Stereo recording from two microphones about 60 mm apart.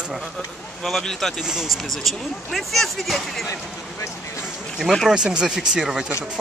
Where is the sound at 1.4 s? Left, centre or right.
Centre.